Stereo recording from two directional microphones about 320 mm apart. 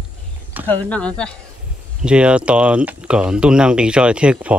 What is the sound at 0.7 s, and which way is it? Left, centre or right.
Speech, centre.